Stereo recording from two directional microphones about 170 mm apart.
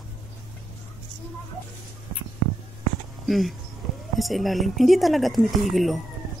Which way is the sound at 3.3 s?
Centre (ahead or behind).